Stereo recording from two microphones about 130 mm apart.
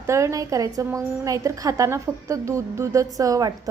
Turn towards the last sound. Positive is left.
turn(degrees=-25)  # may be behind; listen again after turning